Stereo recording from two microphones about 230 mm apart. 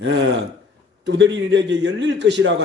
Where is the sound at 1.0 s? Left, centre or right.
Right.